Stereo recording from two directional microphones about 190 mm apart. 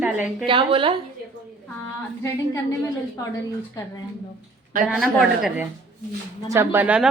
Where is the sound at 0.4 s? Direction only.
25° right (ahead or behind).